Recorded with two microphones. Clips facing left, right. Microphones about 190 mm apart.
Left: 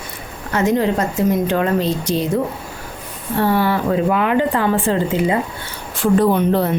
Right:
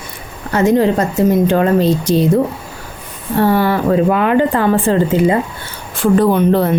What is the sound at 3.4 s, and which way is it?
A woman's voice, 45° right (ahead or behind).